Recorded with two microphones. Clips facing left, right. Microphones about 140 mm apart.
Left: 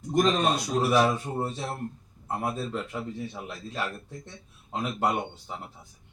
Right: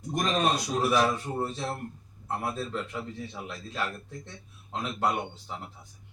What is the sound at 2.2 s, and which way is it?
Speech, 15° left (ahead or behind).